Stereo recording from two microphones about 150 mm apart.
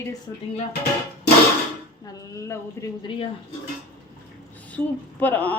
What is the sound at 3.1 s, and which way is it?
Speech, 35° left (ahead or behind).